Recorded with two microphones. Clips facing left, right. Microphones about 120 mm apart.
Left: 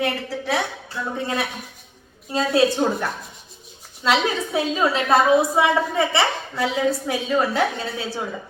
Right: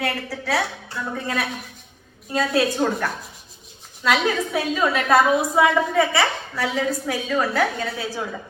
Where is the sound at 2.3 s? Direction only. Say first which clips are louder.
Left 2 dB; 25° left (ahead or behind).